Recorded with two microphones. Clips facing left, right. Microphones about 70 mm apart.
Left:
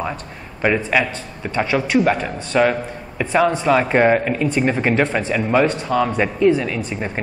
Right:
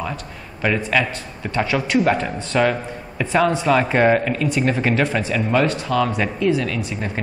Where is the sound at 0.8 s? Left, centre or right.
Centre.